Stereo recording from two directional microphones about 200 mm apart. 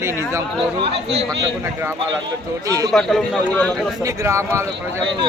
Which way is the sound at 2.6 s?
15° right (ahead or behind).